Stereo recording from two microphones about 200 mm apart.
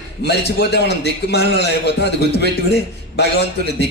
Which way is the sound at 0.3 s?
55° left (ahead or behind).